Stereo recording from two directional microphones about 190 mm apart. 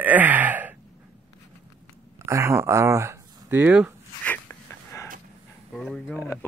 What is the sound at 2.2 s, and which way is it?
Speech, 15° right (ahead or behind).